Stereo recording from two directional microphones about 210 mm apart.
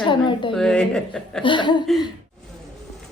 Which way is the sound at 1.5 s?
20° left (ahead or behind).